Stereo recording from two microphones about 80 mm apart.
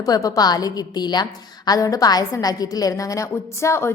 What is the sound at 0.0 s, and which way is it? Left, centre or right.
A woman's voice, left.